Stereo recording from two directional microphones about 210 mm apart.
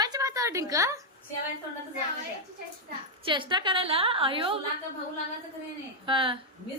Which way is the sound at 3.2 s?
25° right (ahead or behind).